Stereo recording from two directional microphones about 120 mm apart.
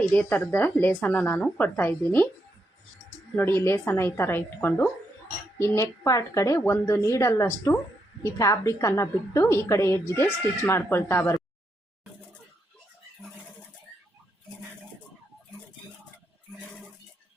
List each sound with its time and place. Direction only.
0.1 s a woman's voice: 15° left (ahead or behind)
3.3 s a woman's voice: 20° left (ahead or behind)